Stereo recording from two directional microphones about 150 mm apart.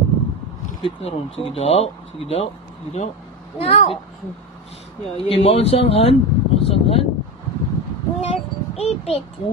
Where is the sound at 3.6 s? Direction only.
40° left (ahead or behind).